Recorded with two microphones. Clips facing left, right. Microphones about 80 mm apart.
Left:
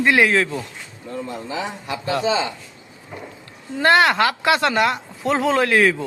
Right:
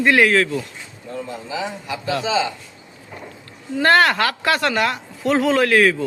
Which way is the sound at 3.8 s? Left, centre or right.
Centre.